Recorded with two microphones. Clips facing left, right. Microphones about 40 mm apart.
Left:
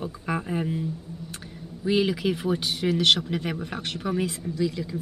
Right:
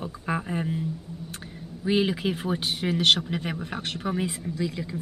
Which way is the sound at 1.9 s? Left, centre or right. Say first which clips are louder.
Left 1 dB; centre.